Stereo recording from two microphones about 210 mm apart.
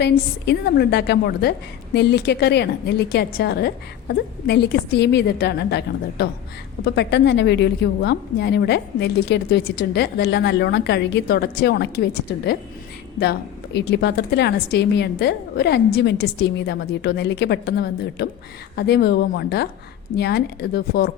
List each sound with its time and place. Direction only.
0.0 s a woman's voice: 55° left (ahead or behind)
13.7 s a woman's voice: 55° left (ahead or behind)